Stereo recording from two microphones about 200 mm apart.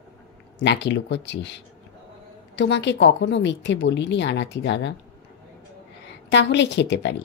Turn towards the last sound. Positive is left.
turn(degrees=60)  # may be behind; listen again after turning